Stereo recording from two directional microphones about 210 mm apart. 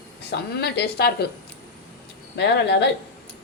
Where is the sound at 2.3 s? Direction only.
55° left (ahead or behind).